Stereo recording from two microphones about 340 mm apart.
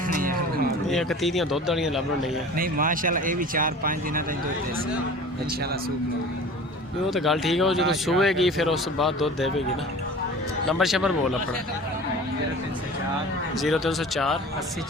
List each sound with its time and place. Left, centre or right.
0.1 s music: right
0.9 s speech: centre
2.6 s speech: right
7.1 s speech: centre
10.7 s speech: centre
13.6 s speech: centre